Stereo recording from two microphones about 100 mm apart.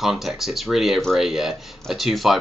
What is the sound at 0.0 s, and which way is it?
Speech, 5° right (ahead or behind).